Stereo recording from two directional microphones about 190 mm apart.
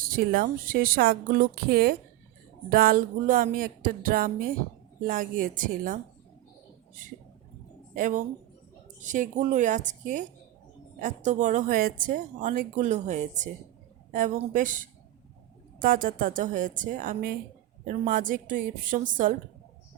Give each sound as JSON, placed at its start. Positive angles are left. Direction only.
{"t": 0.0, "sound": "a woman's voice", "side_deg": -50}
{"t": 7.9, "sound": "a woman's voice", "side_deg": -45}
{"t": 14.5, "sound": "a woman's voice", "side_deg": -45}